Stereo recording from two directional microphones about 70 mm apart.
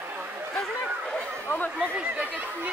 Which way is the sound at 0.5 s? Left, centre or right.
Centre.